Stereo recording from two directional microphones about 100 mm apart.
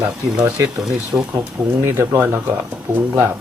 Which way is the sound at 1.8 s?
25° right (ahead or behind).